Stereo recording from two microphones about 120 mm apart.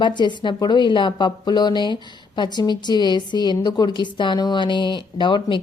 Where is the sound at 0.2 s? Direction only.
40° left (ahead or behind).